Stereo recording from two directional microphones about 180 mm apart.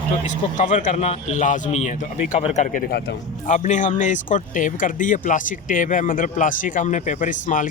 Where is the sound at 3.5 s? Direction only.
40° left (ahead or behind).